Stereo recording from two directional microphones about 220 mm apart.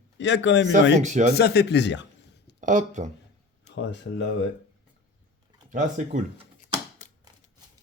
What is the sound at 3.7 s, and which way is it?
Speech, 55° left (ahead or behind).